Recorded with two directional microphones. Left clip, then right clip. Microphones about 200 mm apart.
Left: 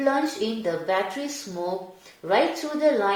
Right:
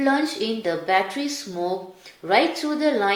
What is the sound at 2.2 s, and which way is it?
Speech, 30° right (ahead or behind).